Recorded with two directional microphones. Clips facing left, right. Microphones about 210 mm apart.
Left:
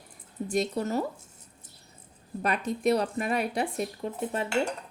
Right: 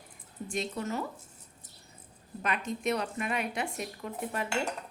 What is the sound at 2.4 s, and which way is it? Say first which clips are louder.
Speech: left 5 dB; 35° left (ahead or behind).